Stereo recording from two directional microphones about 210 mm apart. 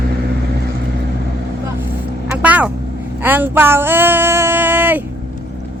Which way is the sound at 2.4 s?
5° right (ahead or behind).